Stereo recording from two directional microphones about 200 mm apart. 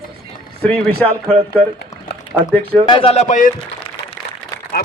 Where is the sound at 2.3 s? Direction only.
Centre (ahead or behind).